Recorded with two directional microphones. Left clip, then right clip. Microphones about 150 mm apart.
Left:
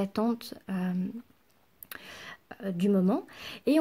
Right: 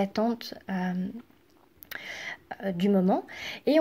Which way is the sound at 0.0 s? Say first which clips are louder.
Right 3 dB; 45° left (ahead or behind).